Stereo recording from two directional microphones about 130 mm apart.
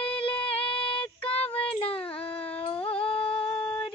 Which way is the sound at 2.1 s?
45° left (ahead or behind).